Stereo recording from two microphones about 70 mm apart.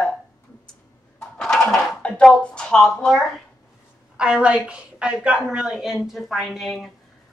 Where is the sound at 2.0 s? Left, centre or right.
Centre.